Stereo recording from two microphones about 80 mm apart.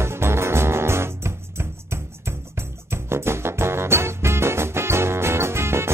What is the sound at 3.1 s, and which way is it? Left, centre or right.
Music, right.